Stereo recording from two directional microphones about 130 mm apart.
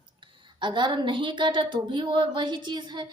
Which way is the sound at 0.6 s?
35° right (ahead or behind).